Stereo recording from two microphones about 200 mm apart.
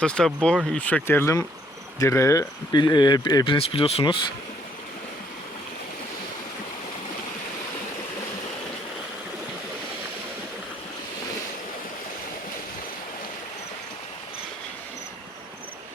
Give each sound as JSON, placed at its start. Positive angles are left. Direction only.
{"t": 0.0, "sound": "speech", "side_deg": 5}